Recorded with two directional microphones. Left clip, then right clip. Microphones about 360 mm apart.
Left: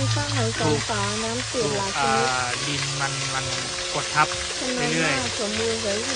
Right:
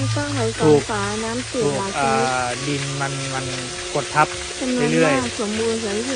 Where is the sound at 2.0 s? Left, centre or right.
Centre.